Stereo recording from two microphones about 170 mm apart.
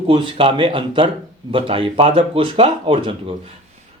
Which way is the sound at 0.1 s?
30° right (ahead or behind).